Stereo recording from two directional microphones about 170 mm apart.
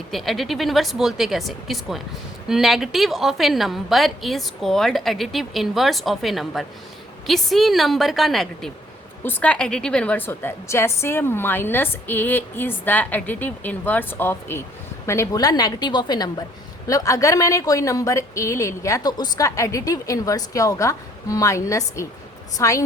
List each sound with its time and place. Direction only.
0.1 s a woman's voice: centre (ahead or behind); by 22.8 s 20° left (ahead or behind)